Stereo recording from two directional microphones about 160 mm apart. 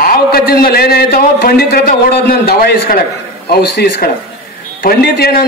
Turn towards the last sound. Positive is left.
turn(degrees=75)  # may be behind; listen again after turning